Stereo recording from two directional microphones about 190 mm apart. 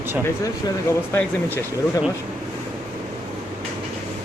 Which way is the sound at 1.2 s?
10° left (ahead or behind).